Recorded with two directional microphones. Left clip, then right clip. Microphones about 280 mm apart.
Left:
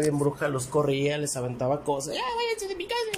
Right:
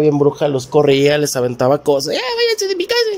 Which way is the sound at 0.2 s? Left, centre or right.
Right.